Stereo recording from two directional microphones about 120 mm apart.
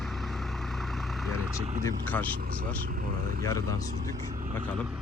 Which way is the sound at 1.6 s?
90° right.